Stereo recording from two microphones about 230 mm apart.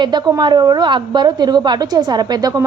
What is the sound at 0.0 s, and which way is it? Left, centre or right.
A woman's voice, centre.